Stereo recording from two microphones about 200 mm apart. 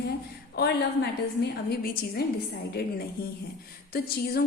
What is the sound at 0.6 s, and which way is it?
A woman's voice, 55° left (ahead or behind).